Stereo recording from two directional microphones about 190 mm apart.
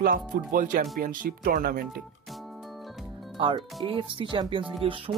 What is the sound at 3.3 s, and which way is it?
Speech, 25° right (ahead or behind).